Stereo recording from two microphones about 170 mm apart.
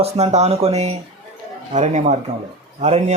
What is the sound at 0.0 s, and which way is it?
A man's voice, 40° right (ahead or behind).